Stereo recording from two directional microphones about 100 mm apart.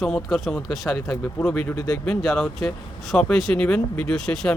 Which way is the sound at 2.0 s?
10° left (ahead or behind).